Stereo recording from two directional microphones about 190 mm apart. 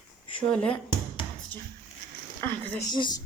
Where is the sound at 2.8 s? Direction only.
20° left (ahead or behind).